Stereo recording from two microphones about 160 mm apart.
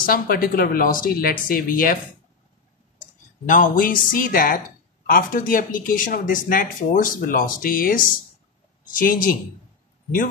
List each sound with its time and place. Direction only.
0.0 s speech: 65° left (ahead or behind)
3.0 s speech: 55° left (ahead or behind)